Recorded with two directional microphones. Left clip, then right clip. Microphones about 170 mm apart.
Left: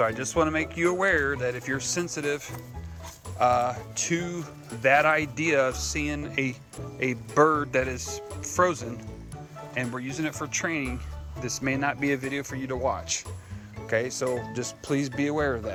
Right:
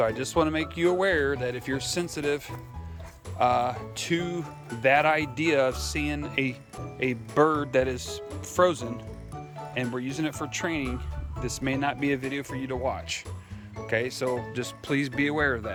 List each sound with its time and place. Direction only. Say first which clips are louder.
0.0 s speech: even; 20° right (ahead or behind)
1.9 s speech: right 2 dB; 35° right (ahead or behind)
4.4 s speech: right 2 dB; 20° right (ahead or behind)
5.7 s speech: even; 35° right (ahead or behind)
9.7 s speech: even; 30° right (ahead or behind)
10.2 s speech: left 2 dB; 40° right (ahead or behind)
10.4 s speech: left 1 dB; 25° right (ahead or behind)